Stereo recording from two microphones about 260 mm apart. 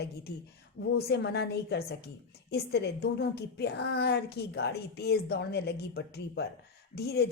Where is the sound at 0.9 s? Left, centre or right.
Left.